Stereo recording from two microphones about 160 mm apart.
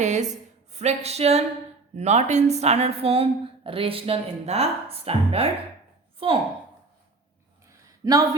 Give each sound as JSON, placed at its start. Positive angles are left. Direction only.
{"t": 0.0, "sound": "a sound", "side_deg": -45}
{"t": 2.0, "sound": "a woman's voice", "side_deg": -45}
{"t": 8.0, "sound": "speech", "side_deg": -20}